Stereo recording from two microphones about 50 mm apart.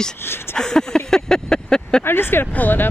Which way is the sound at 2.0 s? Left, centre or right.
Left.